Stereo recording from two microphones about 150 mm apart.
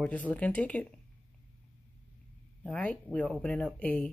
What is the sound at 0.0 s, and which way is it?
Speech, 10° left (ahead or behind).